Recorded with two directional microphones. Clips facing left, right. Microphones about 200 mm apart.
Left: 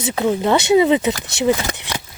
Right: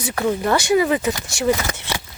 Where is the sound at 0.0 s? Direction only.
15° left (ahead or behind).